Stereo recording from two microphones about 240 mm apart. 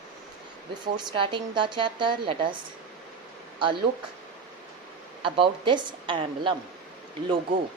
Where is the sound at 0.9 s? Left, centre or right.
Centre.